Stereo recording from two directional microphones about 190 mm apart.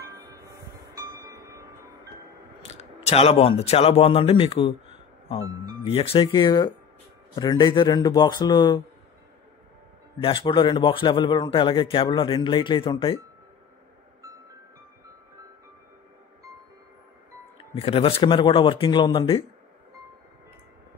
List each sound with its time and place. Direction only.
0.0 s music: 20° right (ahead or behind)
2.6 s speech: 35° left (ahead or behind)
5.9 s a man's voice: 30° left (ahead or behind)
10.2 s a man's voice: 25° left (ahead or behind)
17.6 s a man's voice: 30° left (ahead or behind)